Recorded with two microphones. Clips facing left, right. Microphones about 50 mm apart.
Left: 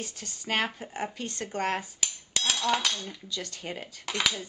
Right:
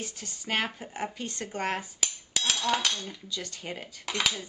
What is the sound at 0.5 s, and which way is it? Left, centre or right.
Speech, centre.